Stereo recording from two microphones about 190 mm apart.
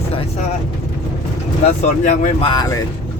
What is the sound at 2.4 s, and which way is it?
Speech, 20° left (ahead or behind).